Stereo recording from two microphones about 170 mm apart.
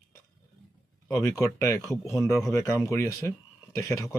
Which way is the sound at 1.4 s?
20° left (ahead or behind).